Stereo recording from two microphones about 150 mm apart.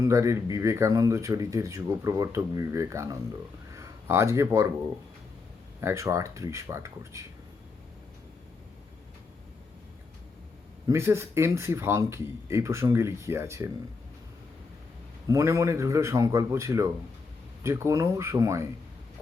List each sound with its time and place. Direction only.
0.0 s speech: 20° right (ahead or behind)
5.8 s speech: 20° right (ahead or behind)
10.8 s speech: 20° right (ahead or behind)
15.3 s speech: 20° right (ahead or behind)